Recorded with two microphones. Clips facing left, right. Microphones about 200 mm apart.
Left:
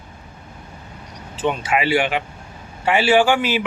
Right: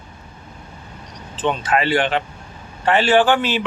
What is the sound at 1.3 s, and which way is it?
Speech, 10° left (ahead or behind).